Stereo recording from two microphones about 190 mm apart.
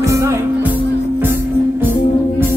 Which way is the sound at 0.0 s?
15° right (ahead or behind).